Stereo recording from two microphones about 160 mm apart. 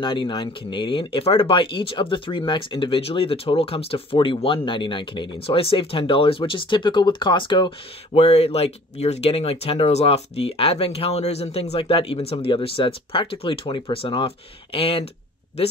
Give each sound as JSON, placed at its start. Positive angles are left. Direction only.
{"t": 0.0, "sound": "speech", "side_deg": 30}
{"t": 8.2, "sound": "speech", "side_deg": 40}